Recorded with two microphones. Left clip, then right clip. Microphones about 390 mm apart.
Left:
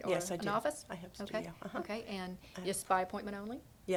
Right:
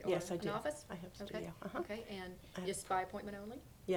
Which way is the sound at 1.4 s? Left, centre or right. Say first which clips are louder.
Left 1 dB; centre.